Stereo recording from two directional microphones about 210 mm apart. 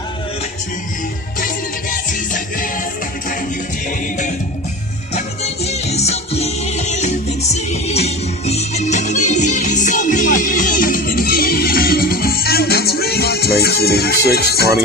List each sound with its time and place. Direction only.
1.4 s music: 40° left (ahead or behind)
5.1 s music: 30° left (ahead or behind); by 14.7 s 50° left (ahead or behind)